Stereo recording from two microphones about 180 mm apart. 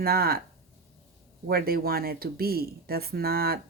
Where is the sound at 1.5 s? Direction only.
55° right (ahead or behind).